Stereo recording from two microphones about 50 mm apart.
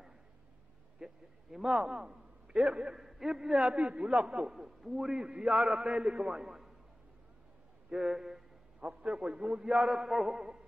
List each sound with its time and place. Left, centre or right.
0.9 s a man's voice: centre
7.9 s a man's voice: centre
8.8 s a man's voice: right
9.8 s a man's voice: centre
10.3 s a man's voice: centre